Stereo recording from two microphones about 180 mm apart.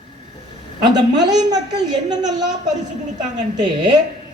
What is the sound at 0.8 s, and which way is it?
A woman's voice, 25° right (ahead or behind).